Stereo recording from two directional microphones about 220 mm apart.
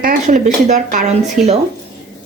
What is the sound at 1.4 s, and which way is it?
Speech, centre (ahead or behind).